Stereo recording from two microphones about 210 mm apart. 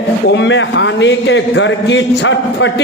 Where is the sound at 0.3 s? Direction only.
60° left (ahead or behind).